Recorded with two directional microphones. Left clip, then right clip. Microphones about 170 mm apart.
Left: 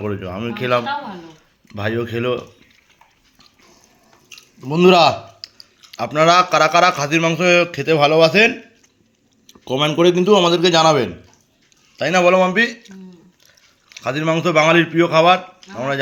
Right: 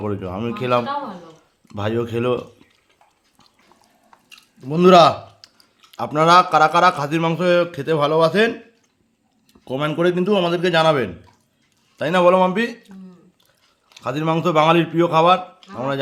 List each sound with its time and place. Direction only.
0.0 s a man's voice: 10° right (ahead or behind)
4.4 s a man's voice: 5° right (ahead or behind)
13.9 s a man's voice: 5° right (ahead or behind)